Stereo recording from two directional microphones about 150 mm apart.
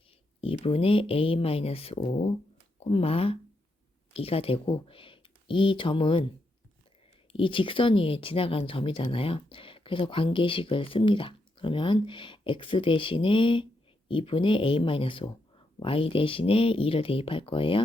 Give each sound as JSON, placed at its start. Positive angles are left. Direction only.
{"t": 0.4, "sound": "speech", "side_deg": 40}
{"t": 7.3, "sound": "speech", "side_deg": 35}